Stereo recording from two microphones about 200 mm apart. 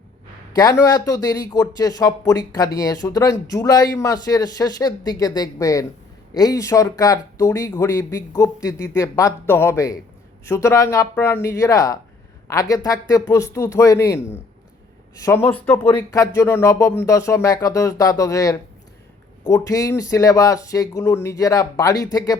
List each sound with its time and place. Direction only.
0.5 s a man's voice: 20° left (ahead or behind)